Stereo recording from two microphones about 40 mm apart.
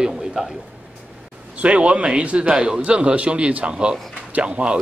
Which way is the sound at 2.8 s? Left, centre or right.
Right.